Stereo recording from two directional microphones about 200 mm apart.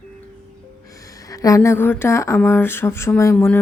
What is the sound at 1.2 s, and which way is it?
Speech, 15° left (ahead or behind).